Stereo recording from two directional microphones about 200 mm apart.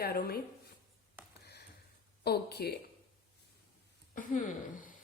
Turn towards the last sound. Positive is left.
turn(degrees=40)  # may be behind; listen again after turning